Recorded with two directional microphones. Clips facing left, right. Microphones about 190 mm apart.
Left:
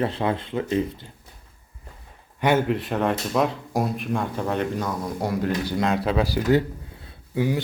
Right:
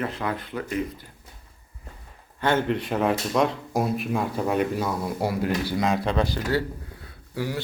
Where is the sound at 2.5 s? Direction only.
5° left (ahead or behind).